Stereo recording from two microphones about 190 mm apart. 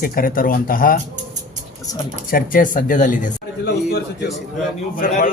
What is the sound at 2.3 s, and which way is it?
Speech, 50° left (ahead or behind).